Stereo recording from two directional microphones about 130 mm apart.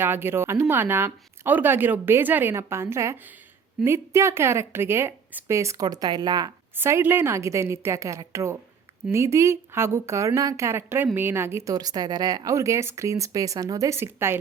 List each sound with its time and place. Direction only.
0.0 s a woman's voice: 15° right (ahead or behind)
6.7 s a woman's voice: 20° right (ahead or behind)